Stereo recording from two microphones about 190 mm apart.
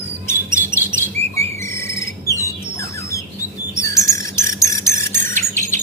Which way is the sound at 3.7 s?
15° left (ahead or behind).